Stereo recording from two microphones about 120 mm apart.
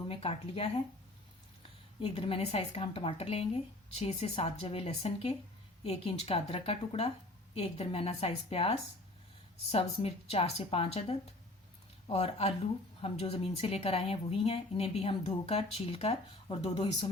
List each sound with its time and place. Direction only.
0.1 s a woman's voice: 50° left (ahead or behind)
2.0 s a woman's voice: 45° left (ahead or behind)